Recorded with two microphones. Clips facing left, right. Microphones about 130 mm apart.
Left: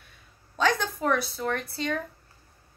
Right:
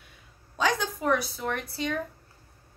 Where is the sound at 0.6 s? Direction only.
15° right (ahead or behind).